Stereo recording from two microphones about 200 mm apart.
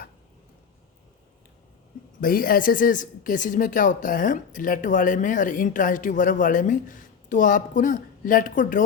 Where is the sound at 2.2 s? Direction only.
45° left (ahead or behind).